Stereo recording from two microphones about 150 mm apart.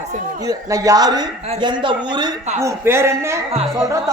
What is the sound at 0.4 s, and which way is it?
Speech, 25° right (ahead or behind).